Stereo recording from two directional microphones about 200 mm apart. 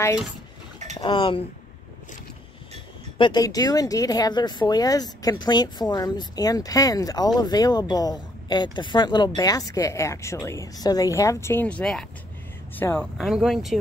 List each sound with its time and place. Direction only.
1.0 s speech: 25° left (ahead or behind)
3.2 s speech: 20° left (ahead or behind); by 13.7 s centre (ahead or behind)